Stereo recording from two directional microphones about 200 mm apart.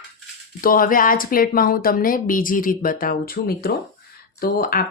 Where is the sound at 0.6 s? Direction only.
45° left (ahead or behind).